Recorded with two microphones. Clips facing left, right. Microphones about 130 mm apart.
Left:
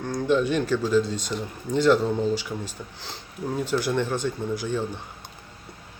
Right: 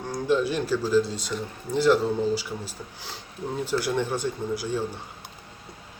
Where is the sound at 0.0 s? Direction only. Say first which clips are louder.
Left 1 dB; 5° right (ahead or behind).